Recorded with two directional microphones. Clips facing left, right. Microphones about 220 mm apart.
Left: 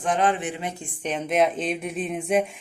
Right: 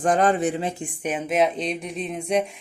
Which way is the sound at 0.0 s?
40° right (ahead or behind).